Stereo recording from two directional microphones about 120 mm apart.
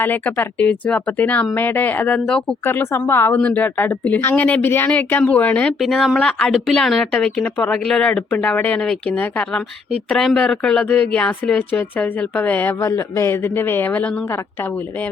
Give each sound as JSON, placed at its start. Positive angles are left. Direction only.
{"t": 0.0, "sound": "a woman's voice", "side_deg": 15}
{"t": 2.6, "sound": "a woman's voice", "side_deg": 20}
{"t": 5.8, "sound": "a woman's voice", "side_deg": 0}